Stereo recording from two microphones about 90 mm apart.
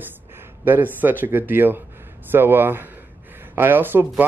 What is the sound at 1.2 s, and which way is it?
Speech, 25° right (ahead or behind).